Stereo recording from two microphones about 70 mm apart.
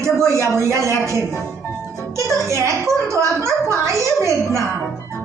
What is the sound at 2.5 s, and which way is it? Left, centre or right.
A woman's voice, right.